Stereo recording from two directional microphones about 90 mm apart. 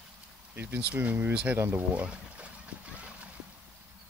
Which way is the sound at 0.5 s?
20° right (ahead or behind).